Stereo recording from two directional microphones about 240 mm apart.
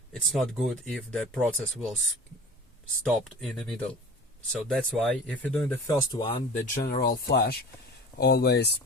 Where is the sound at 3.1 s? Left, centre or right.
Centre.